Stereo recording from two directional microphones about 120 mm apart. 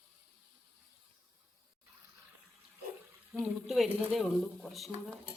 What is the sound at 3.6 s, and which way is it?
Speech, centre (ahead or behind).